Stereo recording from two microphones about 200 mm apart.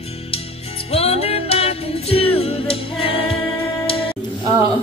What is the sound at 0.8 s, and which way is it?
Music, 30° left (ahead or behind).